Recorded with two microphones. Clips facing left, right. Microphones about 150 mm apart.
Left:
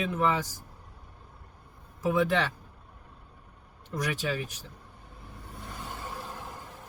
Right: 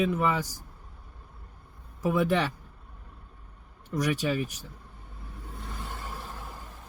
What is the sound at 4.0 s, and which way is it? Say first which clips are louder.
Speech: right 4 dB; 10° right (ahead or behind).